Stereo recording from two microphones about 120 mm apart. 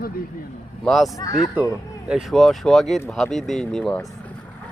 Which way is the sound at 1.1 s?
30° left (ahead or behind).